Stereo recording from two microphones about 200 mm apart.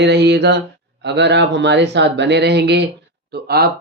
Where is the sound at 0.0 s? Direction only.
60° right (ahead or behind).